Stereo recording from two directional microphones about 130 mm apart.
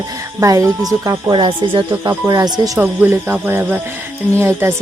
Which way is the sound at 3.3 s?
15° right (ahead or behind).